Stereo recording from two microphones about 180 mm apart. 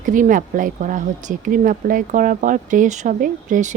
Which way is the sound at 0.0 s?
45° right (ahead or behind).